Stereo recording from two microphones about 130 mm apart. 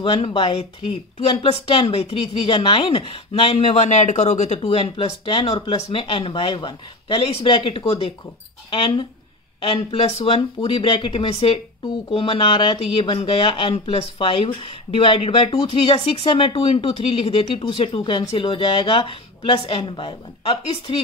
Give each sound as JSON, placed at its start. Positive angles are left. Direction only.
{"t": 0.0, "sound": "speech", "side_deg": 40}
{"t": 3.5, "sound": "speech", "side_deg": 60}
{"t": 4.6, "sound": "speech", "side_deg": 40}